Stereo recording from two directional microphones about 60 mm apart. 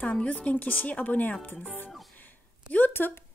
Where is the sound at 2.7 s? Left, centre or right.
Left.